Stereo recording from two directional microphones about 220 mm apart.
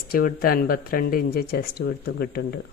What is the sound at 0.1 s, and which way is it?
Speech, 40° left (ahead or behind).